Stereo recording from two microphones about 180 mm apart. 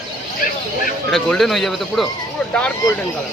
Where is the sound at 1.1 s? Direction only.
Centre (ahead or behind).